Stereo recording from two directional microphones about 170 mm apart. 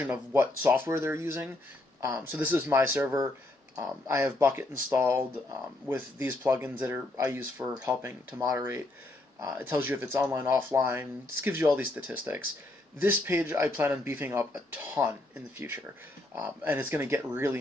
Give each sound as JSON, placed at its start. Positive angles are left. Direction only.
{"t": 0.0, "sound": "speech", "side_deg": -10}
{"t": 16.3, "sound": "speech", "side_deg": -10}